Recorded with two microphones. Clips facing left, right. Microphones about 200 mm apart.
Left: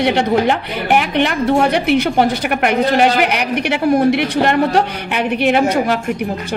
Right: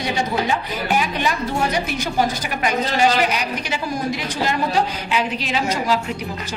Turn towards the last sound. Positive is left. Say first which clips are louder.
# left 6 dB
turn(degrees=55)  # may be behind; listen again after turning